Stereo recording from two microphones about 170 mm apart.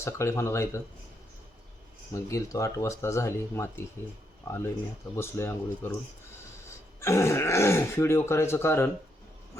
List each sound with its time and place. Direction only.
0.0 s speech: 15° left (ahead or behind)
2.1 s speech: 20° left (ahead or behind)
5.1 s speech: 15° left (ahead or behind)
7.0 s speech: 15° left (ahead or behind)